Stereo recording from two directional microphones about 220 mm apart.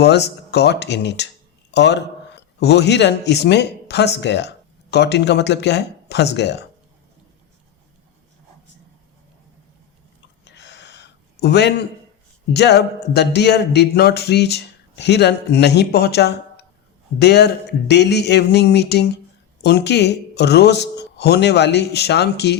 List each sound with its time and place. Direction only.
0.0 s speech: 50° left (ahead or behind)
10.4 s a sound: 50° left (ahead or behind)
12.5 s speech: 50° left (ahead or behind)